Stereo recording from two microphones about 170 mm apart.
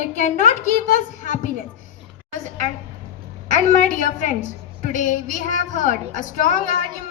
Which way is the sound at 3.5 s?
50° left (ahead or behind).